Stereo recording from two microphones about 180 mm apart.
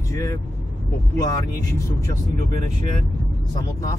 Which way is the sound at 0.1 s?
15° left (ahead or behind).